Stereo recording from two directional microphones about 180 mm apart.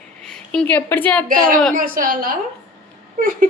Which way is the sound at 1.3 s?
50° right (ahead or behind).